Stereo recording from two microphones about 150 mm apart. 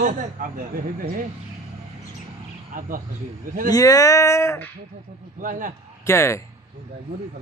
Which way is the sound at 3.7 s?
25° left (ahead or behind).